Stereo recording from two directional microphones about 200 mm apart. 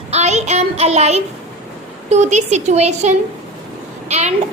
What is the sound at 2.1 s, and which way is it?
A child's voice, 35° right (ahead or behind).